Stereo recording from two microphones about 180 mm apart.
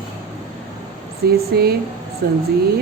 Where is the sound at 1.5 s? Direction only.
60° right (ahead or behind).